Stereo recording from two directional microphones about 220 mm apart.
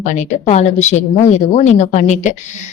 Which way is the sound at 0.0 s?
35° left (ahead or behind).